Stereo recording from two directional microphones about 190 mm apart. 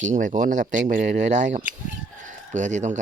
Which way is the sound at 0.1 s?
40° right (ahead or behind).